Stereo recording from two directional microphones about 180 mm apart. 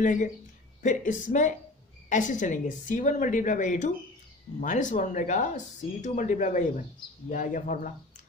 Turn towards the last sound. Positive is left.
turn(degrees=50)  # may be behind; listen again after turning